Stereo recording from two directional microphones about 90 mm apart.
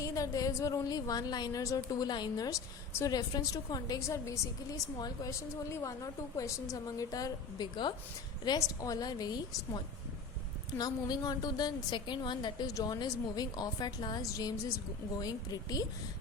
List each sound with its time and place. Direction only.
0.0 s a woman's voice: 40° left (ahead or behind); by 12.6 s 60° left (ahead or behind)
12.6 s a woman's voice: 45° left (ahead or behind)
14.2 s a woman's voice: 40° left (ahead or behind)